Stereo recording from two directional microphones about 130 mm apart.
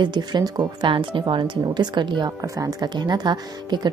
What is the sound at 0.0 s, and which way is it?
A woman's voice, 35° right (ahead or behind).